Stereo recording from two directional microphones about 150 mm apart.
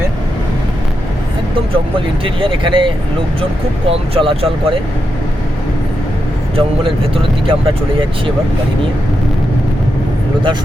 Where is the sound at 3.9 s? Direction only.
40° right (ahead or behind).